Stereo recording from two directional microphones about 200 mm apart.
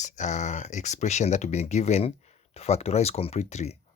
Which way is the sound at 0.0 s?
35° left (ahead or behind).